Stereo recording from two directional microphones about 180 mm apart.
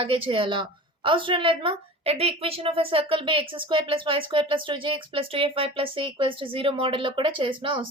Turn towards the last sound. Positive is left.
turn(degrees=-25)  # may be behind; listen again after turning